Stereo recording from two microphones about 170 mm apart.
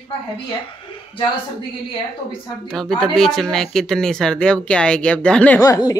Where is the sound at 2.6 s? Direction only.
Centre (ahead or behind).